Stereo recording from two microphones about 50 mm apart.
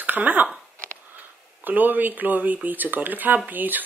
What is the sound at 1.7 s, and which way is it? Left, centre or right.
Speech, right.